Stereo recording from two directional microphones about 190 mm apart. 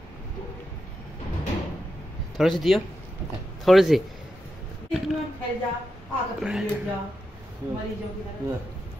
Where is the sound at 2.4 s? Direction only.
Centre (ahead or behind).